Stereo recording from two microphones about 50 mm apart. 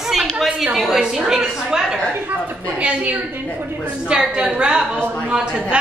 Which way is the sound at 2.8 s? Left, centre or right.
Right.